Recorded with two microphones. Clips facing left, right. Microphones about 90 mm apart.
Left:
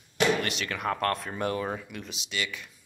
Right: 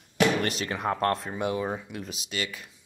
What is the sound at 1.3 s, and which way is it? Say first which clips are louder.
Speech: right 1 dB; 15° right (ahead or behind).